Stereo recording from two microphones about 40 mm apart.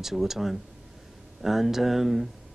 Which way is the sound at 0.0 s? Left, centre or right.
Centre.